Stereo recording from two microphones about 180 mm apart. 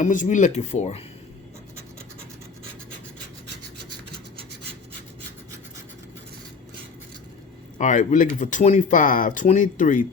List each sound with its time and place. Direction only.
0.0 s speech: 45° left (ahead or behind)
7.8 s speech: 45° left (ahead or behind)